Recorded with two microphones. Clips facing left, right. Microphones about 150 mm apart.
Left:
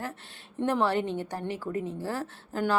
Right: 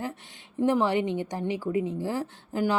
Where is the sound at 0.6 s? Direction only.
15° right (ahead or behind).